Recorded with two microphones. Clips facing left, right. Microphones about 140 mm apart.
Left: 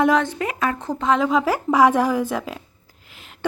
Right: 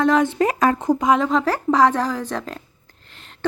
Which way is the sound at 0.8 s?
10° right (ahead or behind).